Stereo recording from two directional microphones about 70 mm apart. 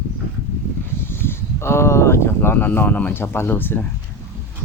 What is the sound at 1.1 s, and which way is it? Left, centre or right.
Speech, left.